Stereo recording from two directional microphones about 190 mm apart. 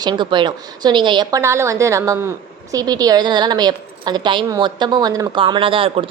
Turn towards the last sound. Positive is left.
turn(degrees=-30)  # may be behind; listen again after turning